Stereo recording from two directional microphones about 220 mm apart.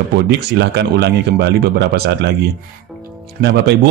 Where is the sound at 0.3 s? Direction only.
50° right (ahead or behind).